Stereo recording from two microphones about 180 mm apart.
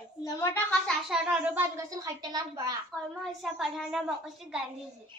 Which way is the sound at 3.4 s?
Centre (ahead or behind).